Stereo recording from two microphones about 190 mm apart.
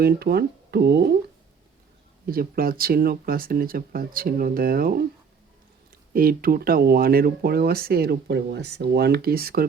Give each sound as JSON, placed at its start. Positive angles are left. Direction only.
{"t": 0.0, "sound": "speech", "side_deg": -55}
{"t": 2.3, "sound": "speech", "side_deg": -50}
{"t": 6.1, "sound": "speech", "side_deg": -50}